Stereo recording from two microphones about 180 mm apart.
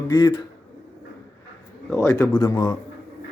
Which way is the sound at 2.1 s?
15° left (ahead or behind).